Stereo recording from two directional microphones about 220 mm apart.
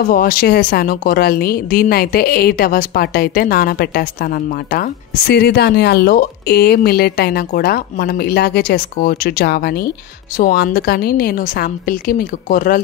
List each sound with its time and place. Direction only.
0.0 s speech: 40° left (ahead or behind)